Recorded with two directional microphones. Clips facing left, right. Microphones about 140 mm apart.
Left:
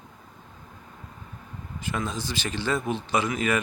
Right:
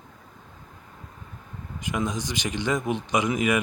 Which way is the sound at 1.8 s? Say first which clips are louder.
Right 2 dB; 15° right (ahead or behind).